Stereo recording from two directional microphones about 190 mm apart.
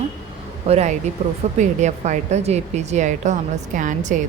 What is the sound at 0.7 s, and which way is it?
Speech, 35° right (ahead or behind).